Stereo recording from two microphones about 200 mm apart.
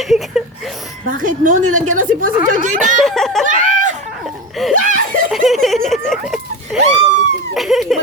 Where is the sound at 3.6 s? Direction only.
40° right (ahead or behind).